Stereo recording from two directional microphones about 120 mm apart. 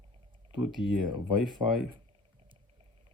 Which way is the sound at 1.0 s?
40° right (ahead or behind).